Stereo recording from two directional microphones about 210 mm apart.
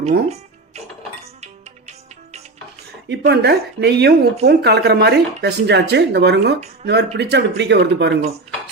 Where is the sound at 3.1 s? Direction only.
50° right (ahead or behind).